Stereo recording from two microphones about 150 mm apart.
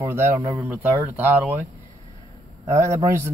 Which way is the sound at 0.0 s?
15° right (ahead or behind).